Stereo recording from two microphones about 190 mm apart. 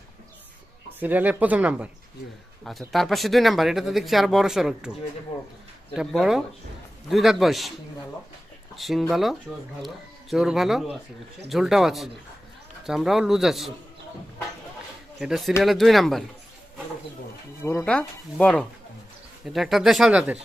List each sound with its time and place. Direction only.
0.9 s speech: 10° right (ahead or behind)
2.9 s speech: centre (ahead or behind)
5.3 s speech: 30° left (ahead or behind)
5.9 s speech: centre (ahead or behind)
8.7 s speech: centre (ahead or behind)
15.2 s speech: centre (ahead or behind)
17.7 s speech: 5° left (ahead or behind)